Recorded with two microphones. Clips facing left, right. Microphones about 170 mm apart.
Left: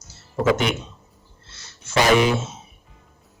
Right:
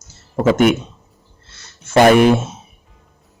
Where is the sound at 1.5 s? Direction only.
55° right (ahead or behind).